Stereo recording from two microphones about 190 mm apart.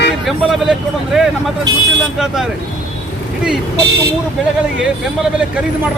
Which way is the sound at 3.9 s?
60° right (ahead or behind).